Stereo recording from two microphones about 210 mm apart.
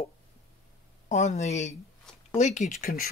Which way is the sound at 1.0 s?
35° left (ahead or behind).